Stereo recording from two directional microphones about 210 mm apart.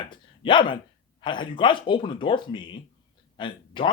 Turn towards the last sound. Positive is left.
turn(degrees=25)  # may be behind; listen again after turning